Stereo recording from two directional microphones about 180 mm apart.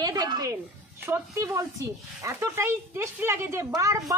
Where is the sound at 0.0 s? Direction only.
20° right (ahead or behind).